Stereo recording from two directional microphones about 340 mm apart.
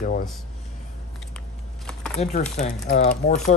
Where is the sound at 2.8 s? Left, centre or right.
Left.